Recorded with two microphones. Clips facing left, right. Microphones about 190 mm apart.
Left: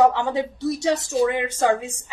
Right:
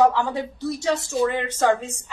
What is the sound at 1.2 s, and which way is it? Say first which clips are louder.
Speech: right 1 dB; 15° left (ahead or behind).